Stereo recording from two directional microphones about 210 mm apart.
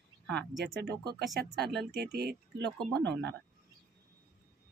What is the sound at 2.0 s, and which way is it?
Speech, 50° right (ahead or behind).